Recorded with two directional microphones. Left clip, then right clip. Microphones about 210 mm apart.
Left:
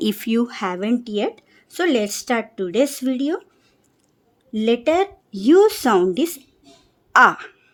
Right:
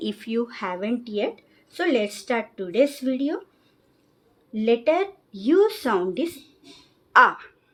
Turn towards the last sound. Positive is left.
turn(degrees=50)  # may be behind; listen again after turning